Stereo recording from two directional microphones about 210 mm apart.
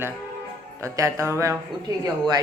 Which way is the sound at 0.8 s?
15° right (ahead or behind).